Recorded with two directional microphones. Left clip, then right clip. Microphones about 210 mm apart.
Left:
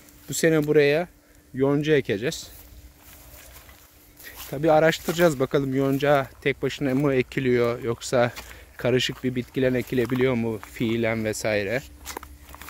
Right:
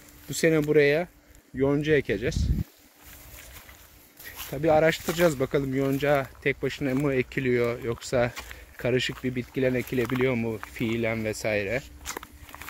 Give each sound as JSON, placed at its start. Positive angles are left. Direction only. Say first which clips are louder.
{"t": 0.3, "sound": "speech", "louder": "left 2 dB", "side_deg": 15}
{"t": 4.5, "sound": "speech", "louder": "left 3 dB", "side_deg": 15}
{"t": 12.2, "sound": "biting", "louder": "left 1 dB", "side_deg": 0}